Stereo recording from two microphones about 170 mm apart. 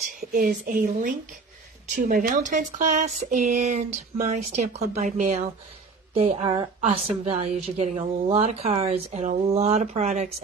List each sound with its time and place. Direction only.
0.2 s a woman's voice: 55° right (ahead or behind)